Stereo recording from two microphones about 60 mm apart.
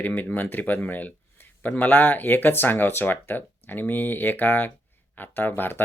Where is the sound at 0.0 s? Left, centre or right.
Left.